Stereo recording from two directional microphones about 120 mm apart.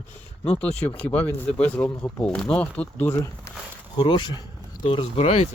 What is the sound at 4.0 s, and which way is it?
Speech, 40° left (ahead or behind).